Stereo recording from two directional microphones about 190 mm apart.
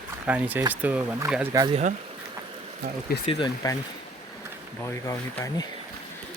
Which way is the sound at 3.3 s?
25° left (ahead or behind).